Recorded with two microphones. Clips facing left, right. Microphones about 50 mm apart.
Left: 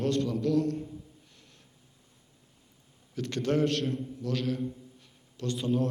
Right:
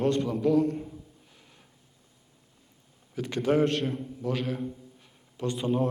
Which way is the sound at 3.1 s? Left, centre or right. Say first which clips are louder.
Right 3 dB; centre.